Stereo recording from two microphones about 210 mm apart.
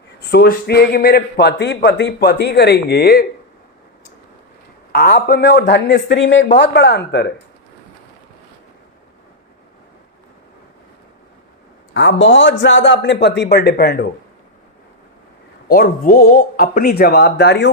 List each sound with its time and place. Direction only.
0.2 s a man's voice: 50° left (ahead or behind)
4.9 s a man's voice: 50° left (ahead or behind)
11.9 s a man's voice: 60° left (ahead or behind)
15.7 s a man's voice: 45° left (ahead or behind)